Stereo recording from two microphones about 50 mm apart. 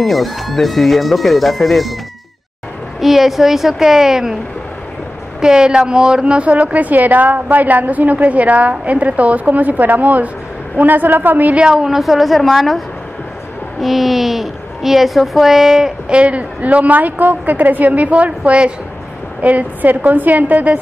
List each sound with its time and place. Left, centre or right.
0.0 s a child's voice: centre
3.0 s a child's voice: centre
5.4 s a woman's voice: centre; by 11.5 s right
11.5 s a child's voice: centre
16.1 s a woman's voice: right